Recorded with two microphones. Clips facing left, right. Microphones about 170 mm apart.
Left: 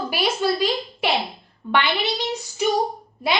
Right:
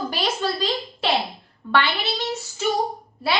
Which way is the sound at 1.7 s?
15° left (ahead or behind).